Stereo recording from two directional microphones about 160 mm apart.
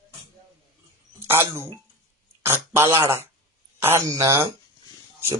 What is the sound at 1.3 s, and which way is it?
Speech, 15° right (ahead or behind).